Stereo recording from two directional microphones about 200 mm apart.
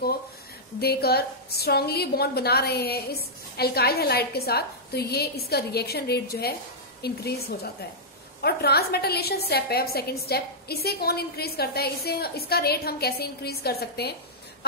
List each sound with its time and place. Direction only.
0.7 s a woman's voice: 50° left (ahead or behind)